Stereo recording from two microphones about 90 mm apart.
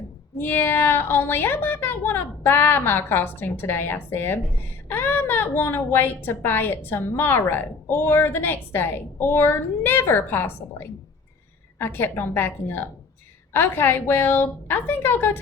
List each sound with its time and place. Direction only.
0.4 s a woman's voice: 25° left (ahead or behind)